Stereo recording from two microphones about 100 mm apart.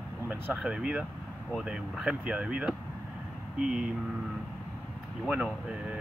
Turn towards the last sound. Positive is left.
turn(degrees=-5)  # may be behind; listen again after turning